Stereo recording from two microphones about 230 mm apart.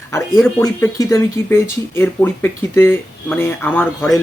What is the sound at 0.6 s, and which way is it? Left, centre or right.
Speech, centre.